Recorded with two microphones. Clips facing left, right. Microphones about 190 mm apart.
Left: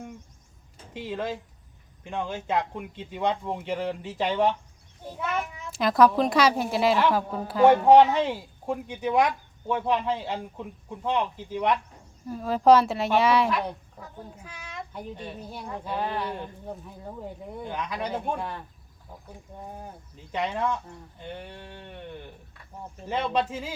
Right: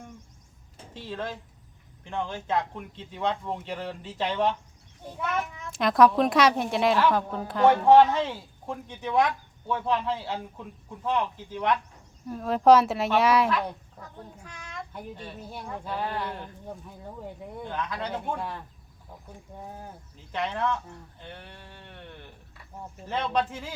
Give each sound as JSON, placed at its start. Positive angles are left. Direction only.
{"t": 0.9, "sound": "a child's voice", "side_deg": 15}
{"t": 12.2, "sound": "a child's voice", "side_deg": 0}
{"t": 15.1, "sound": "speech", "side_deg": 15}
{"t": 15.4, "sound": "a child's voice", "side_deg": 0}
{"t": 15.8, "sound": "speech", "side_deg": 15}
{"t": 17.6, "sound": "speech", "side_deg": 15}
{"t": 18.3, "sound": "a child's voice", "side_deg": 0}
{"t": 20.3, "sound": "speech", "side_deg": 15}
{"t": 23.0, "sound": "speech", "side_deg": 10}